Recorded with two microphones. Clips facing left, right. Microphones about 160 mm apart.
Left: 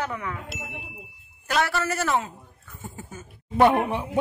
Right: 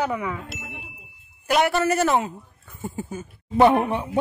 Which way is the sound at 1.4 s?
20° right (ahead or behind).